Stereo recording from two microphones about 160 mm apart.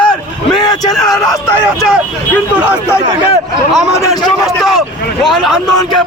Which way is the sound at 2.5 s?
10° right (ahead or behind).